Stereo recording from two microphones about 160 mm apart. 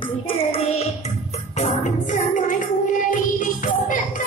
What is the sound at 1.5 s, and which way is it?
Music, 50° left (ahead or behind).